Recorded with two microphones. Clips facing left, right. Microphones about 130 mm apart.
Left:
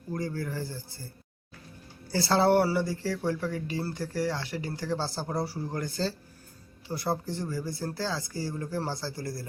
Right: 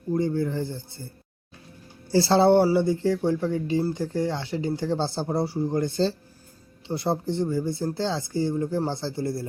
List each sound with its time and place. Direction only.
0.1 s speech: 25° right (ahead or behind)
2.0 s speech: 25° right (ahead or behind)